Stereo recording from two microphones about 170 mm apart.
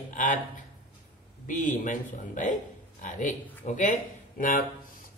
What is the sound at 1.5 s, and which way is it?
Speech, 50° left (ahead or behind).